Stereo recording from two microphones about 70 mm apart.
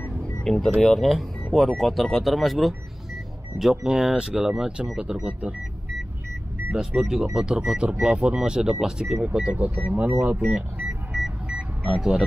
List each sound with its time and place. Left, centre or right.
0.4 s speech: centre
6.7 s speech: centre
10.5 s a sound: centre
11.8 s speech: centre